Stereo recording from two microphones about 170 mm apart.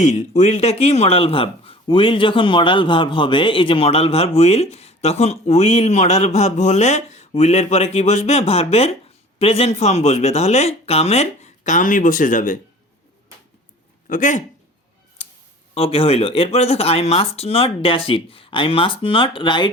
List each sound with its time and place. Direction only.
0.0 s speech: 40° left (ahead or behind)
14.1 s a man's voice: 50° left (ahead or behind)
15.7 s speech: 35° left (ahead or behind)